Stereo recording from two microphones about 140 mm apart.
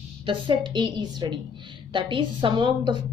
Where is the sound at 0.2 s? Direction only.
35° right (ahead or behind).